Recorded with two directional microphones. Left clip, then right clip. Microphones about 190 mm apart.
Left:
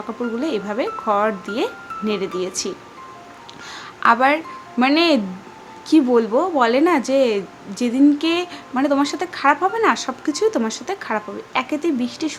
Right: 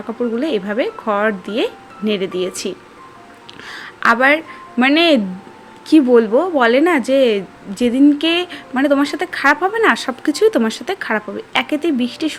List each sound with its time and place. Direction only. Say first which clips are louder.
0.3 s a woman's voice: right 3 dB; 15° right (ahead or behind)
3.7 s a sound: right 1 dB; 15° right (ahead or behind)
4.8 s a woman's voice: right 3 dB; 15° right (ahead or behind)